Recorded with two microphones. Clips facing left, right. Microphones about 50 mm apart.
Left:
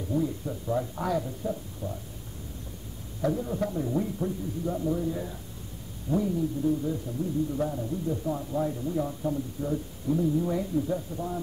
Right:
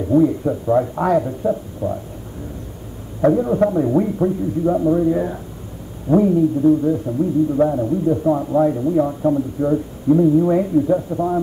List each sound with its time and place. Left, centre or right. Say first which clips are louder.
0.1 s a man's voice: right 14 dB; right
3.2 s a man's voice: right 13 dB; right